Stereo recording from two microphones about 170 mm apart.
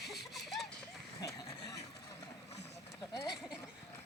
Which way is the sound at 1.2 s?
20° left (ahead or behind).